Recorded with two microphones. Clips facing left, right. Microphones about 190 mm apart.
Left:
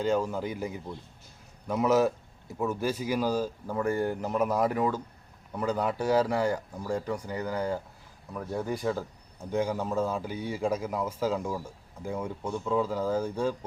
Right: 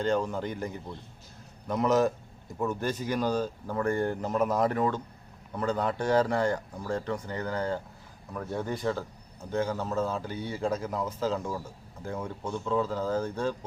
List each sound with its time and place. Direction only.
0.0 s a man's voice: 5° left (ahead or behind)